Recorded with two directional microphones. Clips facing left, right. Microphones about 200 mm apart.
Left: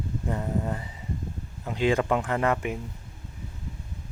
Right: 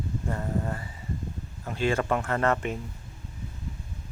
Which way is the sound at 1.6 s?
15° left (ahead or behind).